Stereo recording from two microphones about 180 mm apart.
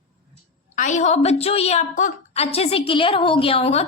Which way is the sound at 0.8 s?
45° left (ahead or behind).